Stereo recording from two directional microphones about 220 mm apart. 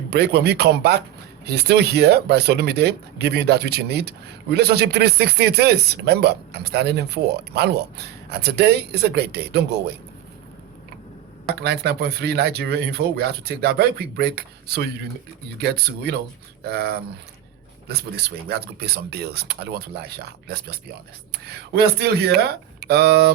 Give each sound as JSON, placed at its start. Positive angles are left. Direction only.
{"t": 0.1, "sound": "speech", "side_deg": -50}
{"t": 11.6, "sound": "speech", "side_deg": -50}